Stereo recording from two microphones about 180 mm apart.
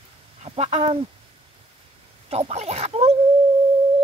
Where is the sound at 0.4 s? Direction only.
35° right (ahead or behind).